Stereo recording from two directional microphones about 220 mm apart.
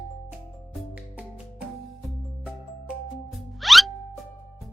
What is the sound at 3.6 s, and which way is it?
Music, centre (ahead or behind).